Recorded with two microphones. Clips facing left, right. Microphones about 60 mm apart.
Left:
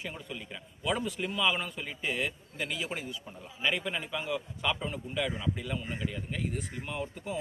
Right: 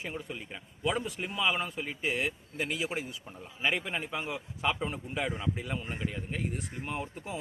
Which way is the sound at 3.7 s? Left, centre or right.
Right.